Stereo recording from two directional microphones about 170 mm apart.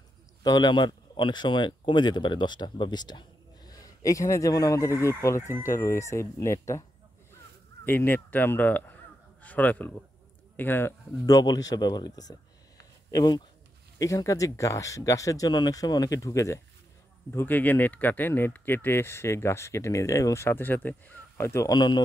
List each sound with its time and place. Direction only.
0.4 s a man's voice: 25° left (ahead or behind)
7.8 s speech: 10° left (ahead or behind)